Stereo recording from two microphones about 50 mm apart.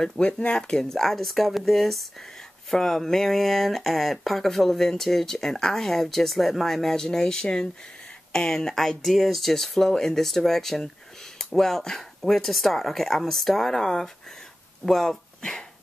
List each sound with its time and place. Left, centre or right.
0.0 s speech: centre
0.9 s speech: centre